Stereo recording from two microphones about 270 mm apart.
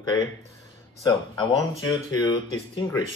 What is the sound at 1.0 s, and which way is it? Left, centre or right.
Speech, centre.